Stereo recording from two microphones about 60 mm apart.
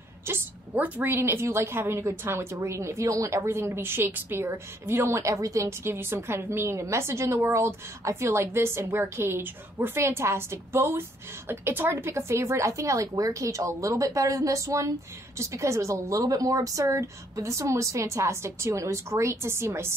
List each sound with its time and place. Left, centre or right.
0.3 s a woman's voice: right
0.7 s a woman's voice: right
1.1 s a woman's voice: right
5.9 s a woman's voice: right